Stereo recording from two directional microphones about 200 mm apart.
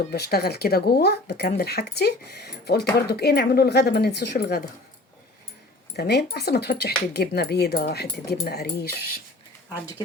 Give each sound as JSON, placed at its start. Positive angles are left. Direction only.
{"t": 0.1, "sound": "speech", "side_deg": 50}
{"t": 6.0, "sound": "speech", "side_deg": 55}